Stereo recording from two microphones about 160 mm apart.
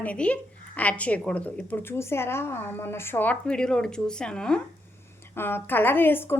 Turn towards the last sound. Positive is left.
turn(degrees=15)  # may be behind; listen again after turning